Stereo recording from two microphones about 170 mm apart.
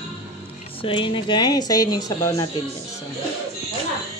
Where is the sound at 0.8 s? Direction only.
30° left (ahead or behind).